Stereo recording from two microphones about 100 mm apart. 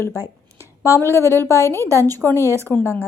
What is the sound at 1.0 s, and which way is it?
Speech, 30° right (ahead or behind).